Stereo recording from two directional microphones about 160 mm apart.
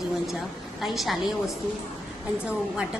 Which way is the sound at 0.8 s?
Centre (ahead or behind).